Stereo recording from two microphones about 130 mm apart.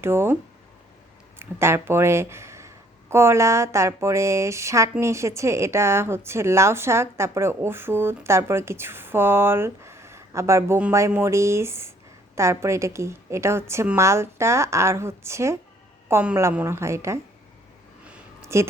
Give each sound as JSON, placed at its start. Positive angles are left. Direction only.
{"t": 0.0, "sound": "speech", "side_deg": -20}
{"t": 1.4, "sound": "speech", "side_deg": -20}
{"t": 18.4, "sound": "speech", "side_deg": -20}